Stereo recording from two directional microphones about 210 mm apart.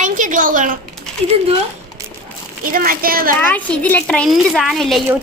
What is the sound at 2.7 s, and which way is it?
Speech, 45° right (ahead or behind).